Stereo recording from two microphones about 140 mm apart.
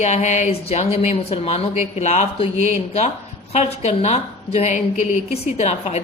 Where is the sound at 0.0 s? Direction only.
55° left (ahead or behind).